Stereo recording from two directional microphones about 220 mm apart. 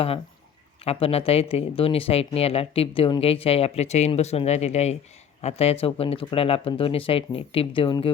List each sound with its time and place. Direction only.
0.9 s speech: 25° left (ahead or behind)